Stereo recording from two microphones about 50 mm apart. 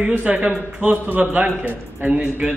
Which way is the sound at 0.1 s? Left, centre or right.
Right.